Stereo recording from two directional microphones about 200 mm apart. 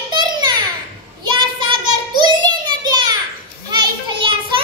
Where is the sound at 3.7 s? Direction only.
25° right (ahead or behind).